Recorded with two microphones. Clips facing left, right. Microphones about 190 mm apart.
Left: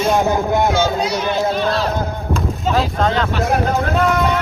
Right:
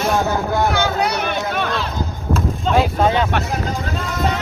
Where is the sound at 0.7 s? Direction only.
65° right (ahead or behind).